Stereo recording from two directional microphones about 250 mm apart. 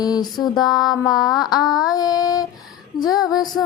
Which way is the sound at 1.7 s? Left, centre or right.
Centre.